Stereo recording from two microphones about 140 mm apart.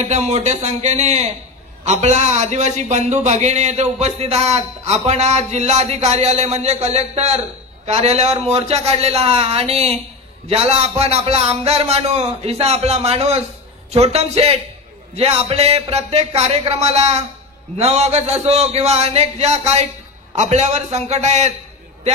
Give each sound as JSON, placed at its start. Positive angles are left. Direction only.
{"t": 0.0, "sound": "a man's voice", "side_deg": -50}